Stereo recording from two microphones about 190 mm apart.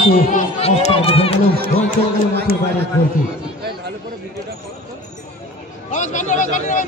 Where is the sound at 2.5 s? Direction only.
55° left (ahead or behind).